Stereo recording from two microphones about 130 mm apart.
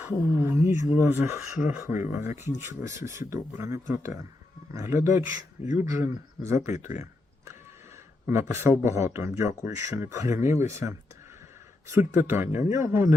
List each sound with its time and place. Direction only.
0.0 s speech: 20° right (ahead or behind)
1.4 s speech: 10° right (ahead or behind)
1.8 s speech: 20° right (ahead or behind)
8.3 s speech: 20° right (ahead or behind)